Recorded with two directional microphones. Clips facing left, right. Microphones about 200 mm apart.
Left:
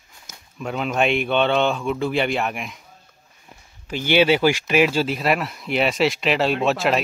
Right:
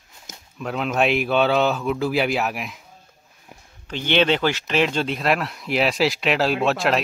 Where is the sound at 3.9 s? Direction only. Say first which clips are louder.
Left 2 dB; 10° left (ahead or behind).